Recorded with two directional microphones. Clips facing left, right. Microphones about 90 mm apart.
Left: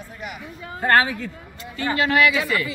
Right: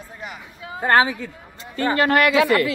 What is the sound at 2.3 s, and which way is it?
Speech, 70° right (ahead or behind).